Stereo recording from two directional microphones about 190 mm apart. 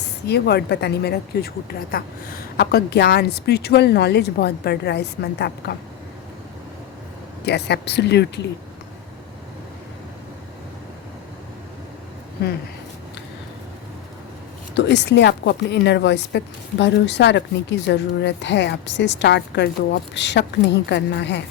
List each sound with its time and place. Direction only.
0.3 s a woman's voice: 60° left (ahead or behind)
7.4 s a woman's voice: 60° left (ahead or behind)
14.8 s a woman's voice: 65° left (ahead or behind)